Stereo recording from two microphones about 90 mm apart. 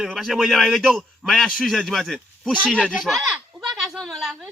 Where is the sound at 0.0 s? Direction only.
Centre (ahead or behind).